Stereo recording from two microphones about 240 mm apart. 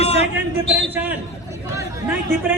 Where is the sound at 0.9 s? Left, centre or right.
Centre.